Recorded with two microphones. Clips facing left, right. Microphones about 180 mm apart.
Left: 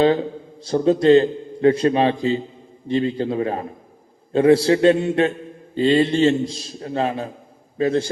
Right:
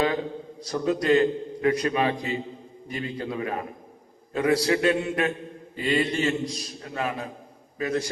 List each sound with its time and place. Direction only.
0.6 s a man's voice: 30° left (ahead or behind)